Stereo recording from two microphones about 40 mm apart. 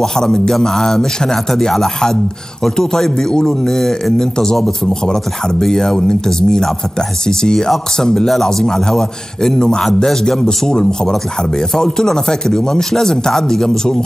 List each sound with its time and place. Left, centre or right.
0.0 s speech: centre